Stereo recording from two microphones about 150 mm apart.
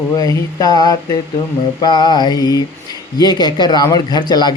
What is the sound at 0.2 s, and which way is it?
A man's voice, 25° left (ahead or behind).